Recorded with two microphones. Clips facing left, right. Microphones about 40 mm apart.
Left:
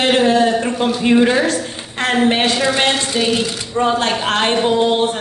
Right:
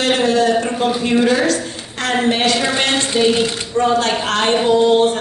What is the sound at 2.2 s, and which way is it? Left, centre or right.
A woman's voice, left.